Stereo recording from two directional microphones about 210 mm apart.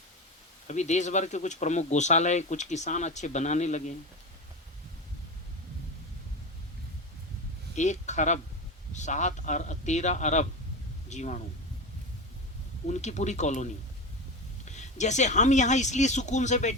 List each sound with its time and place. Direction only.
0.7 s speech: 35° left (ahead or behind)
7.8 s speech: 35° left (ahead or behind)
12.9 s speech: 35° left (ahead or behind)